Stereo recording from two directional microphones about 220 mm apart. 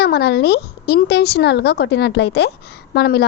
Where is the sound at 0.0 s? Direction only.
45° left (ahead or behind).